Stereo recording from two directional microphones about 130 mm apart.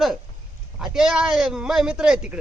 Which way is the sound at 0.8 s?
5° right (ahead or behind).